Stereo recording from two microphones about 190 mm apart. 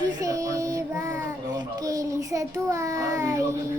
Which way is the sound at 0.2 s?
15° right (ahead or behind).